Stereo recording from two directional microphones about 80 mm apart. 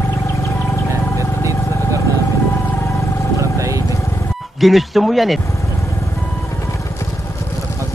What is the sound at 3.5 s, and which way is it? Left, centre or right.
Vehicle, right.